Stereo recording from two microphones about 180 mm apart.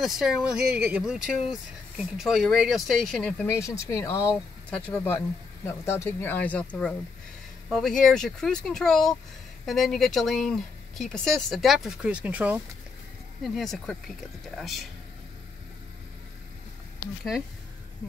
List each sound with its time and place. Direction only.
0.0 s speech: centre (ahead or behind)
3.4 s speech: 15° left (ahead or behind); by 14.9 s centre (ahead or behind)